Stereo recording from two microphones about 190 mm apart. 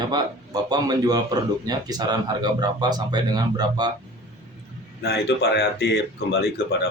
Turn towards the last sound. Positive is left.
turn(degrees=60)  # may be behind; listen again after turning